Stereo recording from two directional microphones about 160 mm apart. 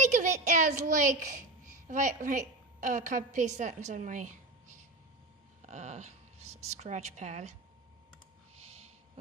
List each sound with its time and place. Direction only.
0.0 s a woman's voice: 50° right (ahead or behind)
8.5 s snort: 40° right (ahead or behind)